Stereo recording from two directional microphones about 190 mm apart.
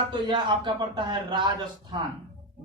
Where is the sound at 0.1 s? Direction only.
25° right (ahead or behind).